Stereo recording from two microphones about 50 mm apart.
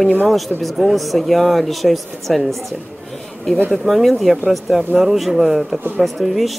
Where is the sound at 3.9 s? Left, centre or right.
Centre.